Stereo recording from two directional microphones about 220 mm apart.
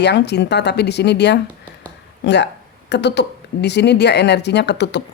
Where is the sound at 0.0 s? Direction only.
50° left (ahead or behind).